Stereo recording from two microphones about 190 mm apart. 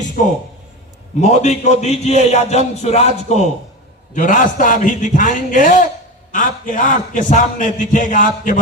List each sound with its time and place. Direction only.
0.2 s a man's voice: 45° left (ahead or behind)